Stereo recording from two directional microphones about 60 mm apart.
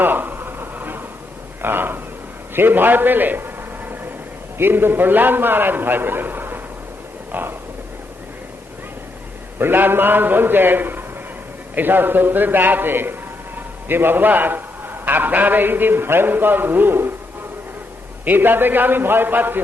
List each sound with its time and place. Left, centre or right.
0.0 s a sound: right
1.6 s a man's voice: right
9.6 s a man's voice: right
18.3 s a man's voice: right